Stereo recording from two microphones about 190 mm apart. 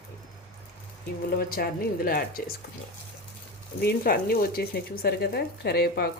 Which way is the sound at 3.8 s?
55° left (ahead or behind).